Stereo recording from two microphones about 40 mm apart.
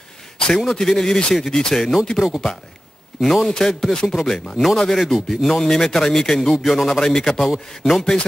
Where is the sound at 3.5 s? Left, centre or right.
Centre.